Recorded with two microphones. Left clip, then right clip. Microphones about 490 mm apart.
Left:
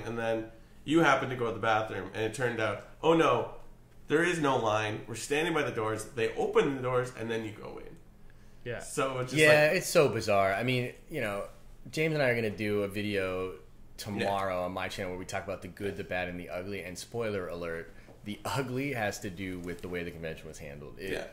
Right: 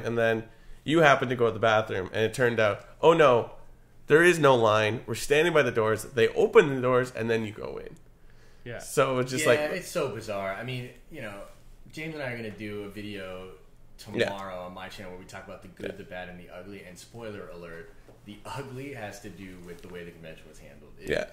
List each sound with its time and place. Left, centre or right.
0.0 s speech: right
8.9 s speech: right
9.4 s speech: left
14.4 s speech: left